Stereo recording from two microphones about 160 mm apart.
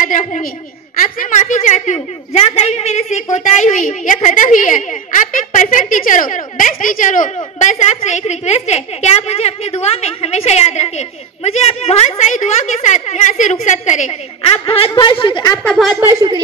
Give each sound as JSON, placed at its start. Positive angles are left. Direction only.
{"t": 0.0, "sound": "a woman's voice", "side_deg": 50}
{"t": 15.6, "sound": "speech", "side_deg": 5}
{"t": 15.9, "sound": "speech", "side_deg": -15}